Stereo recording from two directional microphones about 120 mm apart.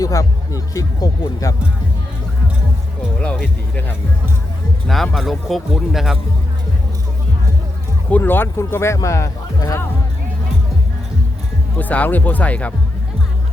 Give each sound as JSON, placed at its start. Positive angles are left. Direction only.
{"t": 0.0, "sound": "speech", "side_deg": 30}
{"t": 3.2, "sound": "music", "side_deg": 5}
{"t": 5.1, "sound": "speech", "side_deg": 0}
{"t": 8.1, "sound": "speech", "side_deg": 15}
{"t": 11.8, "sound": "speech", "side_deg": 15}